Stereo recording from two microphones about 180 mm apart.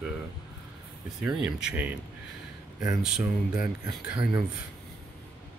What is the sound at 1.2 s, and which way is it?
Speech, 5° right (ahead or behind).